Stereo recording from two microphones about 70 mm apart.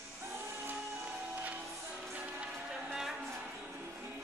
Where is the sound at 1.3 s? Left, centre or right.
Right.